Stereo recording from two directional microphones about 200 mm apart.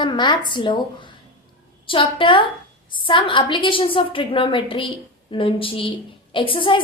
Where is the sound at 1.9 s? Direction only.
25° left (ahead or behind).